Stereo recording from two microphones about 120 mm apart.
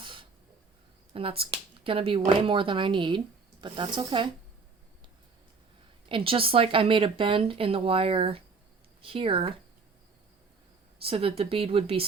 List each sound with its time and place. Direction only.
0.0 s a sound: 45° right (ahead or behind)
1.1 s speech: 50° right (ahead or behind)
6.1 s speech: 50° right (ahead or behind)
11.0 s speech: 50° right (ahead or behind)